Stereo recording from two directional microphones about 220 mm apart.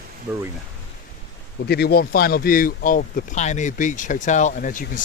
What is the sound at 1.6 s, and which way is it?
Speech, 45° left (ahead or behind).